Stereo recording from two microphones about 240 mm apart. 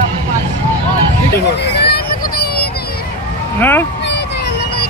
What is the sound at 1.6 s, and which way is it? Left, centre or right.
Vehicle, left.